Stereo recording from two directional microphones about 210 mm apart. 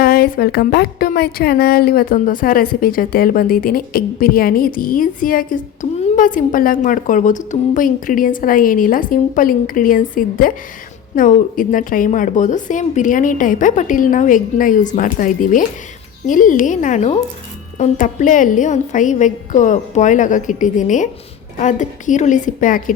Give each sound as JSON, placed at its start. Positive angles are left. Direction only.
{"t": 0.0, "sound": "speech", "side_deg": 45}